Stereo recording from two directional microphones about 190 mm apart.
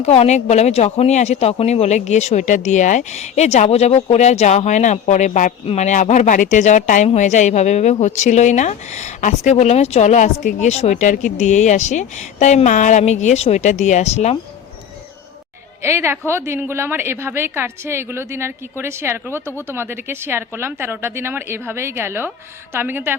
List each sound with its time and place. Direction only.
0.0 s speech: 35° left (ahead or behind)
15.8 s a woman's voice: 15° right (ahead or behind)